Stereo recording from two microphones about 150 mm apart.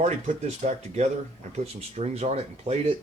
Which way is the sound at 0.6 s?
55° right (ahead or behind).